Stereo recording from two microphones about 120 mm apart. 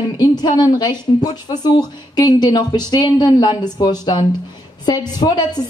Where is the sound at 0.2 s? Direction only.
35° left (ahead or behind).